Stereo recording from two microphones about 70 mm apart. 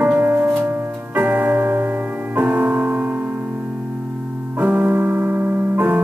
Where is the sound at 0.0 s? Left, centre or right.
Right.